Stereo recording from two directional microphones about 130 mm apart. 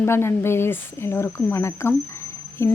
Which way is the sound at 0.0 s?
20° left (ahead or behind).